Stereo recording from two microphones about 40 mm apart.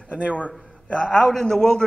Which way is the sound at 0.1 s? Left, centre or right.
Right.